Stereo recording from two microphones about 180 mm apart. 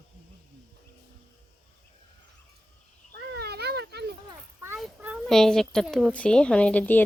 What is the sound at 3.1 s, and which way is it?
Children playing, 65° right (ahead or behind).